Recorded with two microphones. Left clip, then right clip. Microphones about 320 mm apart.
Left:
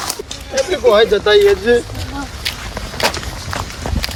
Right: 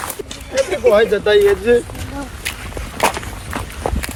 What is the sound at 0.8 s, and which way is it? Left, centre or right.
Speech, centre.